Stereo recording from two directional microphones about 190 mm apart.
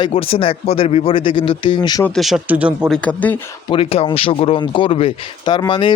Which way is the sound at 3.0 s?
10° left (ahead or behind).